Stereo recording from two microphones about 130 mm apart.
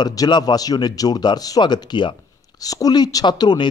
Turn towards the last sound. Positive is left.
turn(degrees=30)  # may be behind; listen again after turning